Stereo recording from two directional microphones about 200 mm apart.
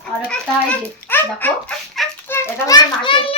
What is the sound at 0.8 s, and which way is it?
A child's voice, 10° left (ahead or behind).